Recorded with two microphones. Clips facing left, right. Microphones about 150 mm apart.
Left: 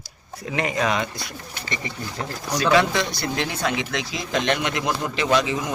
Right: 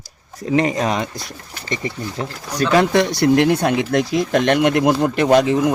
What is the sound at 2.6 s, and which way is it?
Speech, 50° right (ahead or behind).